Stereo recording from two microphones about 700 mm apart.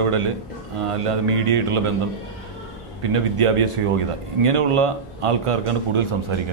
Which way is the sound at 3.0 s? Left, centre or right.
Right.